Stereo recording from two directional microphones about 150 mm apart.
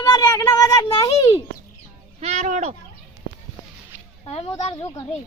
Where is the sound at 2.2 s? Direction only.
50° right (ahead or behind).